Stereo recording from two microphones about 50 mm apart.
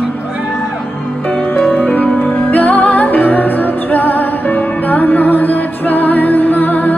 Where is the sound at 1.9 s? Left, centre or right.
Left.